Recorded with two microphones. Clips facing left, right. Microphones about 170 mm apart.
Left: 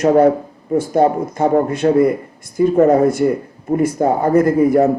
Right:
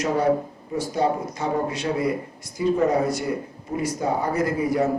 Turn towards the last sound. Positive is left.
turn(degrees=55)  # may be behind; listen again after turning